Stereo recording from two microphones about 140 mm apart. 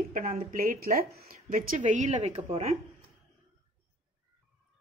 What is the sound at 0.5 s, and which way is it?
A woman's voice, 85° right.